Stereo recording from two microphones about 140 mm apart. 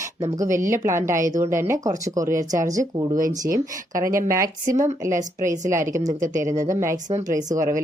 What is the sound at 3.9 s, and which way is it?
Speech, 20° right (ahead or behind).